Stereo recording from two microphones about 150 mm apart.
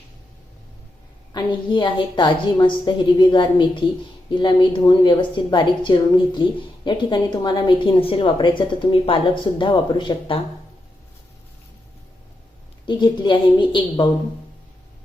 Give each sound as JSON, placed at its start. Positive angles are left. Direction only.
{"t": 1.3, "sound": "a woman's voice", "side_deg": 30}
{"t": 12.8, "sound": "a woman's voice", "side_deg": 30}